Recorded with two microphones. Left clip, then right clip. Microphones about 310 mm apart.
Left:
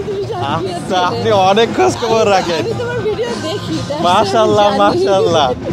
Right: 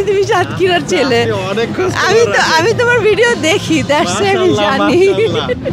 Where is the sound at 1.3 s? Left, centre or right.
Left.